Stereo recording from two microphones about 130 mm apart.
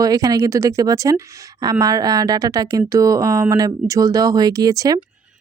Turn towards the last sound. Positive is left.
turn(degrees=-25)  # may be behind; listen again after turning